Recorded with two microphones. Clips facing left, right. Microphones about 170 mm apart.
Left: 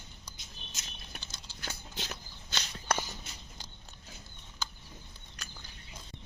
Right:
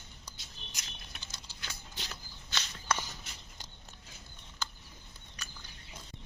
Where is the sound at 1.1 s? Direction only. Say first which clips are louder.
Left 2 dB; 45° left (ahead or behind).